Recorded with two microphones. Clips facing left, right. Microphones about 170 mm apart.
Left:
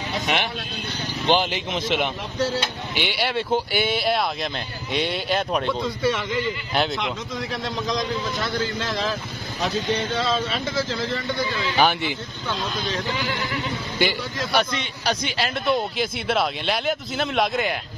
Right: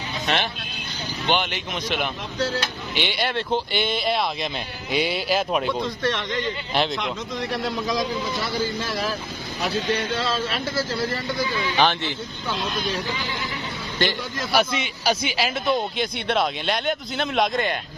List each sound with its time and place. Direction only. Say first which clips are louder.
0.3 s speech: right 1 dB; 10° left (ahead or behind)
1.2 s speech: left 3 dB; 30° left (ahead or behind)
3.1 s a man's voice: left 2 dB; 10° left (ahead or behind)
6.0 s a man's voice: left 4 dB; 5° left (ahead or behind); by 9.1 s 10° right (ahead or behind)
10.3 s a man's voice: left 1 dB; 5° right (ahead or behind)
11.7 s speech: left 2 dB; 10° left (ahead or behind)
12.7 s speech: right 1 dB; 10° right (ahead or behind)
14.0 s speech: left 1 dB; 10° left (ahead or behind)
14.4 s a man's voice: right 1 dB; 5° right (ahead or behind)